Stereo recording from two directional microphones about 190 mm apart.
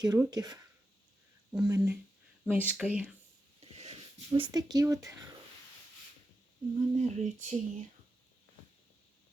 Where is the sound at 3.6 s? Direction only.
35° right (ahead or behind); by 5.3 s 15° right (ahead or behind).